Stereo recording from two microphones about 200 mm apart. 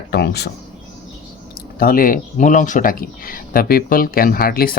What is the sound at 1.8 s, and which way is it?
Speech, 45° left (ahead or behind).